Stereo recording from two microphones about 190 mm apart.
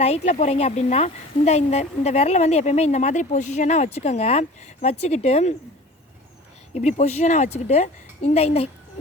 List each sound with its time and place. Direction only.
0.0 s a woman's voice: 35° left (ahead or behind)
6.7 s a woman's voice: 35° left (ahead or behind)